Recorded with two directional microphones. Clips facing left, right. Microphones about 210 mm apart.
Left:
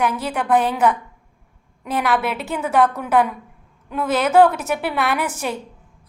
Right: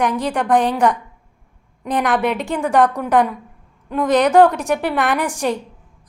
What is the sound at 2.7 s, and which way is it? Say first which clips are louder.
Speech: right 2 dB; 15° right (ahead or behind).